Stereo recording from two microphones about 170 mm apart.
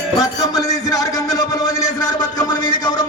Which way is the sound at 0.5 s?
20° left (ahead or behind).